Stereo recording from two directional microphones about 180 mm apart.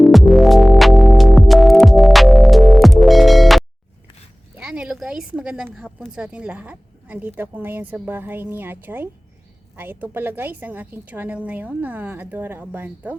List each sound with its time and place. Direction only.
0.0 s music: centre (ahead or behind)
4.5 s a sound: 5° right (ahead or behind)
6.0 s a woman's voice: 5° right (ahead or behind)